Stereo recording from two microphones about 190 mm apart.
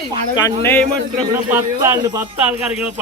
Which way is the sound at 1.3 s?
10° right (ahead or behind).